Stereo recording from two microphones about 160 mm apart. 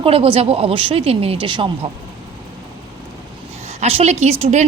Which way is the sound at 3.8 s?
40° right (ahead or behind).